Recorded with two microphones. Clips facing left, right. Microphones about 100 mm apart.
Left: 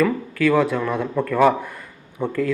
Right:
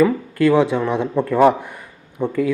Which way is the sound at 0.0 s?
25° right (ahead or behind).